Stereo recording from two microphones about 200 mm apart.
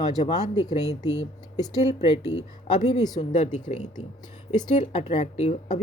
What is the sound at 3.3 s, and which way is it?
Speech, 35° left (ahead or behind).